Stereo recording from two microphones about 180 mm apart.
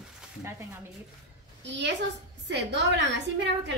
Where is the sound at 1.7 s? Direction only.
80° right.